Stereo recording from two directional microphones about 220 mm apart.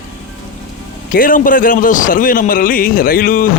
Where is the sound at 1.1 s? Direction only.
40° left (ahead or behind).